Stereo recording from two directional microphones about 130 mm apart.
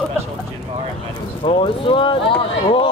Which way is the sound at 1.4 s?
40° left (ahead or behind).